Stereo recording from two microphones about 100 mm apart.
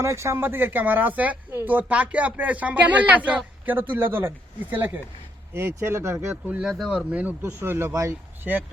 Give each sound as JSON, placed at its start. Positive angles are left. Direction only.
{"t": 0.0, "sound": "speech", "side_deg": -30}
{"t": 6.3, "sound": "speech", "side_deg": -15}
{"t": 6.7, "sound": "speech", "side_deg": 0}
{"t": 7.1, "sound": "speech", "side_deg": -15}
{"t": 7.4, "sound": "speech", "side_deg": -25}